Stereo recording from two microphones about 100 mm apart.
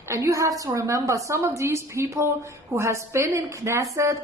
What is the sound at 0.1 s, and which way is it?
A woman's voice, 30° right (ahead or behind).